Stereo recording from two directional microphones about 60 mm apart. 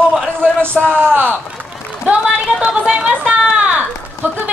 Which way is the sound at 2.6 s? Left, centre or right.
Centre.